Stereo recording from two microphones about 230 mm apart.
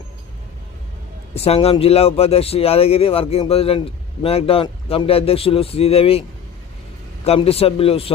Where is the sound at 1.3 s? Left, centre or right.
Left.